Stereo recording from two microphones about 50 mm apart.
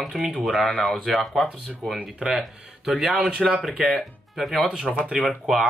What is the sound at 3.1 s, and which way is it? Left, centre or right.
Speech, centre.